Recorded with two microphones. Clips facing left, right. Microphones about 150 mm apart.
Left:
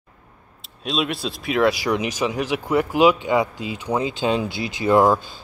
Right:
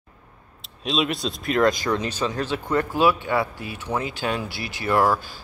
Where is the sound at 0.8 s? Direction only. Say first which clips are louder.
Even; centre (ahead or behind).